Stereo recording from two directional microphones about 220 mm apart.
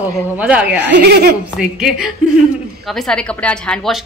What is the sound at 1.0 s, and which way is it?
Speech, 45° right (ahead or behind).